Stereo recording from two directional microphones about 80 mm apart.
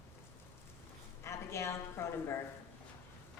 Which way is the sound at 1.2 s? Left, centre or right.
Left.